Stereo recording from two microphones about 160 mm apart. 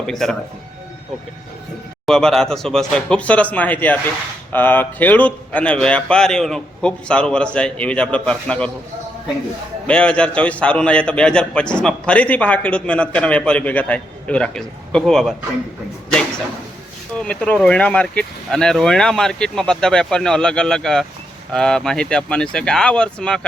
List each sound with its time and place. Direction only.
0.0 s speech: centre (ahead or behind)
2.0 s a man's voice: 5° left (ahead or behind)
9.8 s a man's voice: 5° left (ahead or behind)
17.2 s speech: 5° left (ahead or behind)